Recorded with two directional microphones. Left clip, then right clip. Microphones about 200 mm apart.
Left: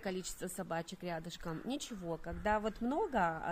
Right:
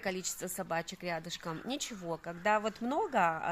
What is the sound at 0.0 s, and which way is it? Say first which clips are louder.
A woman's voice: right 4 dB; 20° right (ahead or behind).